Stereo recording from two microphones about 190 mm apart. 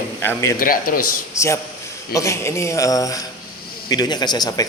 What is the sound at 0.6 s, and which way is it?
Speech, 50° left (ahead or behind).